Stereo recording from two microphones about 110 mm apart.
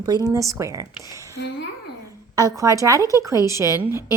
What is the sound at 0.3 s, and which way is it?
A woman's voice, 30° right (ahead or behind).